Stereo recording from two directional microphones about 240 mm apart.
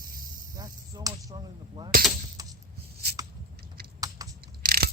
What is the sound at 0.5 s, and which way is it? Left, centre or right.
Speech, centre.